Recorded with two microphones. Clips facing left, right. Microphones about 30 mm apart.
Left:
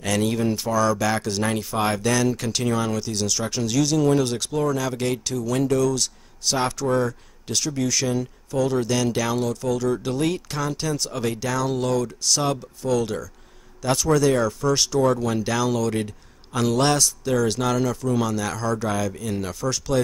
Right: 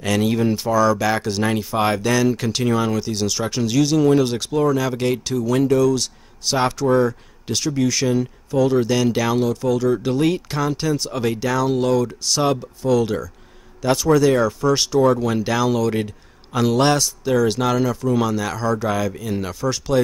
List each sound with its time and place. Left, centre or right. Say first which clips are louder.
0.0 s speech: right 3 dB; centre